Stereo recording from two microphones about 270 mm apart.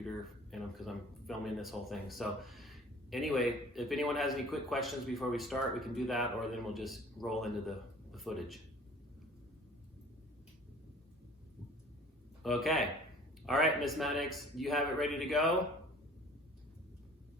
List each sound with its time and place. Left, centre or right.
0.5 s speech: centre
12.4 s speech: centre